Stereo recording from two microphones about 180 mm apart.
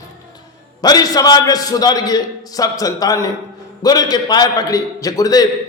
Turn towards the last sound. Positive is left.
turn(degrees=20)  # may be behind; listen again after turning